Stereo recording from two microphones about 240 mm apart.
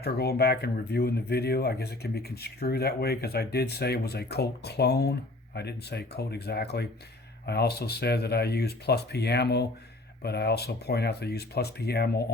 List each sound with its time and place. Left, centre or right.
0.0 s speech: left